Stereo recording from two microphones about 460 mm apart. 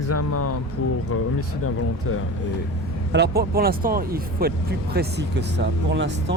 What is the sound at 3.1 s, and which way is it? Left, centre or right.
Speech, right.